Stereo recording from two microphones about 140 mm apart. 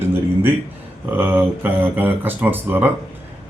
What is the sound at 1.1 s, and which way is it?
A man's voice, 15° right (ahead or behind).